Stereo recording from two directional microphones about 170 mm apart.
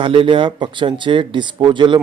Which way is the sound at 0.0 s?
30° right (ahead or behind).